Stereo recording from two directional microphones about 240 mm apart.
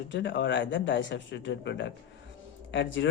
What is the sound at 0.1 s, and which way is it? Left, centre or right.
A man's voice, left.